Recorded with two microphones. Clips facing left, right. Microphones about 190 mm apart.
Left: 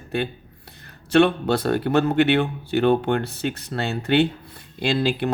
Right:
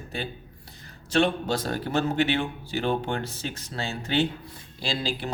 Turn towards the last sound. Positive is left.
turn(degrees=60)  # may be behind; listen again after turning